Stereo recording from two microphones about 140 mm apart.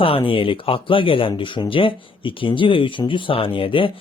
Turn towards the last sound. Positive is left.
turn(degrees=40)  # may be behind; listen again after turning